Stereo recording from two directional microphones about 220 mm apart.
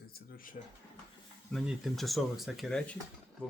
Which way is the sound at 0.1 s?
45° left (ahead or behind).